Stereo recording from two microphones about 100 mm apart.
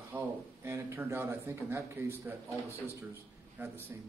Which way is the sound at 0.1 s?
25° right (ahead or behind).